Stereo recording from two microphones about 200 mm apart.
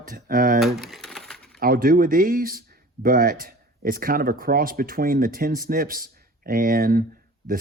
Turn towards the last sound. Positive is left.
turn(degrees=-45)  # may be behind; listen again after turning